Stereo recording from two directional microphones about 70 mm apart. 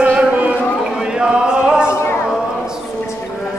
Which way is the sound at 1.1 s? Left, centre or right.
Centre.